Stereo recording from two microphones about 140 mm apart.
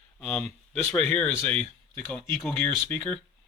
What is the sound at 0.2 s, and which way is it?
Speech, 5° left (ahead or behind).